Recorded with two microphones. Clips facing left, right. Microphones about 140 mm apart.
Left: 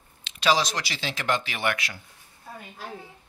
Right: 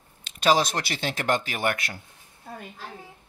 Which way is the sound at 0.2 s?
45° right (ahead or behind).